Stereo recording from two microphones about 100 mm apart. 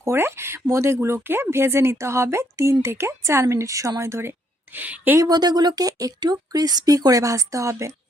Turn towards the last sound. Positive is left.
turn(degrees=-30)  # may be behind; listen again after turning